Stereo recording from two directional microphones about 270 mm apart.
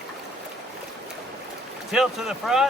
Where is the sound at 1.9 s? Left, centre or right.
Centre.